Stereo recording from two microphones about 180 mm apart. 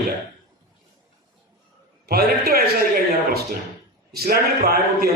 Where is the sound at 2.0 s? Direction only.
60° right (ahead or behind).